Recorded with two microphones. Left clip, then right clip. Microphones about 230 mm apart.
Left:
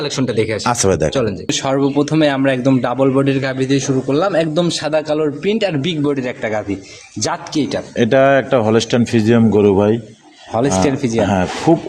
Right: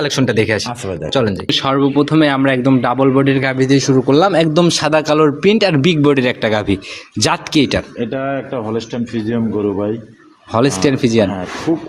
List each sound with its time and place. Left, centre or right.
0.0 s a man's voice: right
0.6 s speech: left
1.5 s a man's voice: centre
3.6 s a man's voice: right
7.9 s speech: left
10.5 s a man's voice: centre